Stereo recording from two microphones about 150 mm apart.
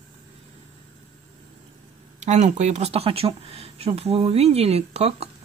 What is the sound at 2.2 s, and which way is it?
Speech, 50° right (ahead or behind).